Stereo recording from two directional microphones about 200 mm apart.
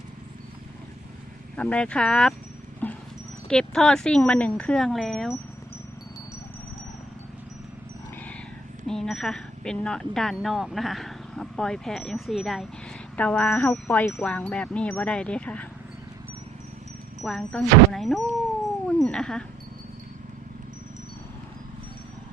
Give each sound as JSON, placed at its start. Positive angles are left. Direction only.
{"t": 1.5, "sound": "speech", "side_deg": 5}
{"t": 2.8, "sound": "a sound", "side_deg": 10}
{"t": 3.5, "sound": "speech", "side_deg": 5}
{"t": 8.9, "sound": "speech", "side_deg": 0}
{"t": 13.1, "sound": "wind chime", "side_deg": 5}
{"t": 17.2, "sound": "speech", "side_deg": 0}
{"t": 18.9, "sound": "cat", "side_deg": 5}